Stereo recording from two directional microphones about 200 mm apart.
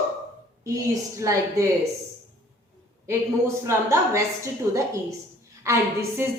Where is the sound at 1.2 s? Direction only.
15° right (ahead or behind).